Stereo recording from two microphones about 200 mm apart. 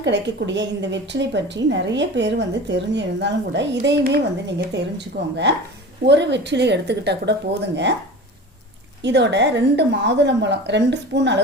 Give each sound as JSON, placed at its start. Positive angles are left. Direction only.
{"t": 0.0, "sound": "a woman's voice", "side_deg": -60}
{"t": 9.0, "sound": "a woman's voice", "side_deg": -60}